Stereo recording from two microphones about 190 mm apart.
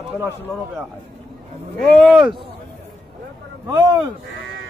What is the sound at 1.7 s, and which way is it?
Speech, 5° left (ahead or behind).